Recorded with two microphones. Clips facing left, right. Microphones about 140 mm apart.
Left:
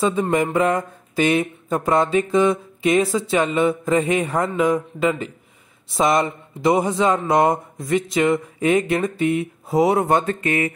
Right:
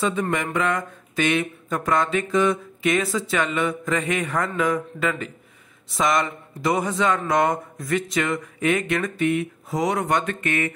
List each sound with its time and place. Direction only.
0.0 s a man's voice: 25° left (ahead or behind)